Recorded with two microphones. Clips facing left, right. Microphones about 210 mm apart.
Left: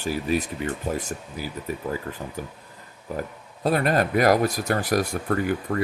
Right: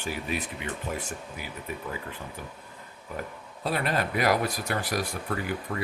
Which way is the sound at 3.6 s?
45° left (ahead or behind).